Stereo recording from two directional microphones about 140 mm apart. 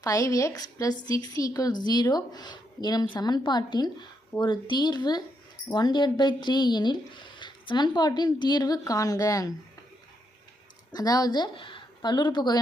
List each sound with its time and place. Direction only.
0.0 s a woman's voice: 25° left (ahead or behind)
10.9 s speech: 25° left (ahead or behind)